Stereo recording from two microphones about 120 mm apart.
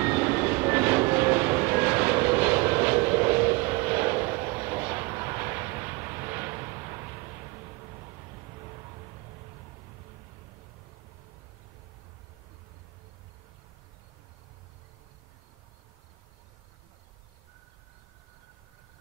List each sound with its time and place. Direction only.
0.0 s vehicle: 15° right (ahead or behind)